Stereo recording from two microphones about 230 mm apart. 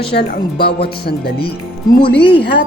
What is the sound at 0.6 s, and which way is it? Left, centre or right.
Speech, left.